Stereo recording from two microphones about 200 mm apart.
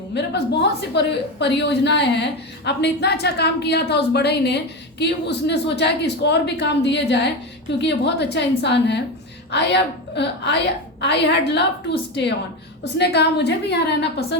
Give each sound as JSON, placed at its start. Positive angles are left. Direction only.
{"t": 0.1, "sound": "a woman's voice", "side_deg": 60}
{"t": 12.8, "sound": "a woman's voice", "side_deg": 55}